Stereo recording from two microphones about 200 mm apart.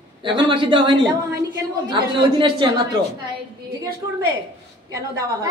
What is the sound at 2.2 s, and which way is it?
Speech, 25° right (ahead or behind).